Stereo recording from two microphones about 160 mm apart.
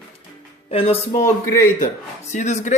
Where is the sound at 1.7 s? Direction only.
50° left (ahead or behind).